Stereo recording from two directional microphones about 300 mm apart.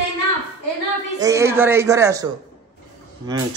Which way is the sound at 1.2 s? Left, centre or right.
Centre.